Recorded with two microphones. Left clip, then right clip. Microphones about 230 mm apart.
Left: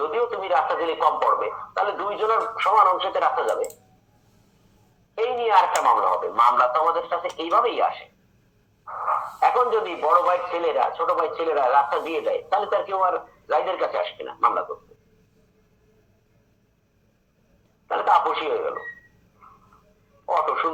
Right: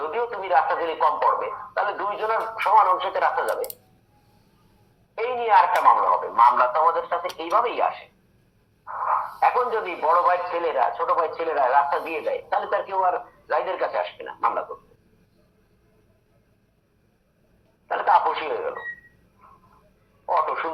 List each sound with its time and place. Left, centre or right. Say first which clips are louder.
0.0 s speech: left 2 dB; left
5.1 s speech: right 1 dB; left
9.0 s speech: even; left
17.8 s speech: even; left
20.2 s speech: left 1 dB; left